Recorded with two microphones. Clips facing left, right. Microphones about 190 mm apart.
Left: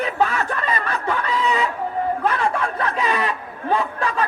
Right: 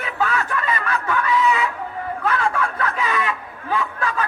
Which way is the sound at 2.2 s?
35° left (ahead or behind).